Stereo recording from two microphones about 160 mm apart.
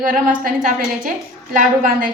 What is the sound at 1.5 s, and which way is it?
Speech, 60° right (ahead or behind).